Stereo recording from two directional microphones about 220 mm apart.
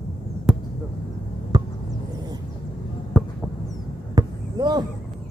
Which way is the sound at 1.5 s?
20° right (ahead or behind).